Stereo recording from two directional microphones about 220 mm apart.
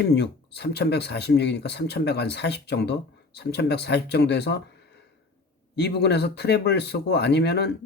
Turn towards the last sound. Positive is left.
turn(degrees=50)  # may be behind; listen again after turning